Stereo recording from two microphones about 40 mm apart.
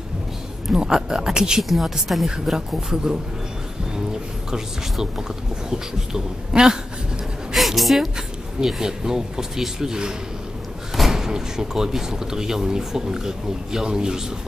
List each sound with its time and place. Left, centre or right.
0.7 s speech: centre
1.6 s a woman's voice: centre
5.7 s speech: centre
7.5 s a woman's voice: centre
8.5 s a man's voice: centre